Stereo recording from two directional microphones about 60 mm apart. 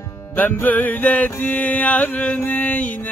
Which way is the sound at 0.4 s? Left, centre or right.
Left.